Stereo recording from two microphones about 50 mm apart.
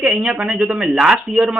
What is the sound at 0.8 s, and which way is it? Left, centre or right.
Speech, centre.